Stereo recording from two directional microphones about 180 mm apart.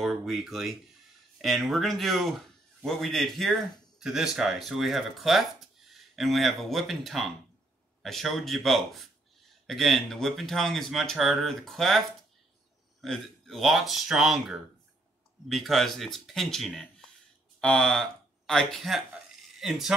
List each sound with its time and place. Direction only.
0.0 s speech: centre (ahead or behind)
13.0 s speech: centre (ahead or behind)